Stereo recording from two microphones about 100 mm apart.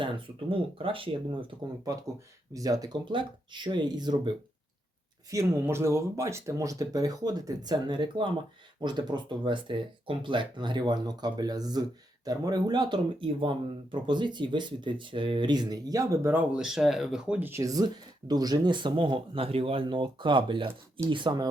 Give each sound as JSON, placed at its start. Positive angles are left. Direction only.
{"t": 0.5, "sound": "speech", "side_deg": -60}
{"t": 2.5, "sound": "speech", "side_deg": -35}
{"t": 3.1, "sound": "speech", "side_deg": -50}
{"t": 5.3, "sound": "speech", "side_deg": -30}
{"t": 13.1, "sound": "speech", "side_deg": -60}
{"t": 16.2, "sound": "speech", "side_deg": -20}
{"t": 16.6, "sound": "speech", "side_deg": -5}
{"t": 17.5, "sound": "speech", "side_deg": -35}